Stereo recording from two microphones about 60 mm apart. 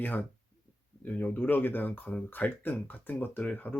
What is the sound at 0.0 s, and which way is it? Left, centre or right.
Speech, left.